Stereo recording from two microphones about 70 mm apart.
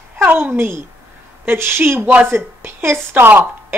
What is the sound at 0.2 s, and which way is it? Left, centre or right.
A woman's voice, right.